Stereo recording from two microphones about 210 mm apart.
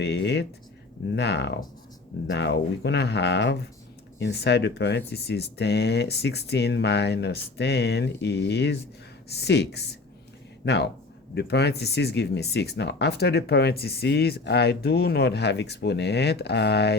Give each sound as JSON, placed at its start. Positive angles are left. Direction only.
{"t": 0.0, "sound": "speech", "side_deg": 55}